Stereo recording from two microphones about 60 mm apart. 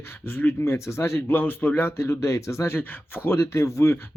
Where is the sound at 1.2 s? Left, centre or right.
Left.